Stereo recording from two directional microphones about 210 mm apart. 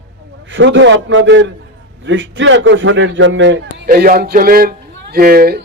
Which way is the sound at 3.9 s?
45° right (ahead or behind).